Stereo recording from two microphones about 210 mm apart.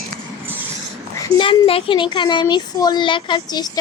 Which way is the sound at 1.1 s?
25° left (ahead or behind).